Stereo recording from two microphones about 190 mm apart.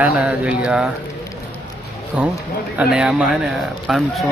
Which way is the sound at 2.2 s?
5° right (ahead or behind).